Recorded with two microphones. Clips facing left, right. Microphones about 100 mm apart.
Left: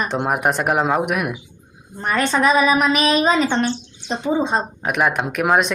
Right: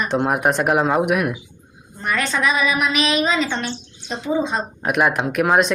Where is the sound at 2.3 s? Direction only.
40° left (ahead or behind).